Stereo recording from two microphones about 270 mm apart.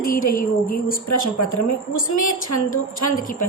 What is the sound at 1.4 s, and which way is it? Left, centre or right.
A woman's voice, left.